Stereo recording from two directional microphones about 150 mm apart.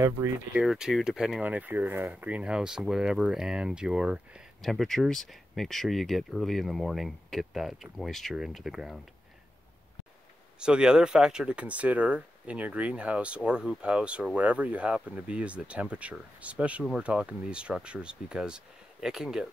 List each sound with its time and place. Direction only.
0.2 s speech: 25° right (ahead or behind)
0.6 s speech: 5° right (ahead or behind)
10.6 s speech: 5° right (ahead or behind)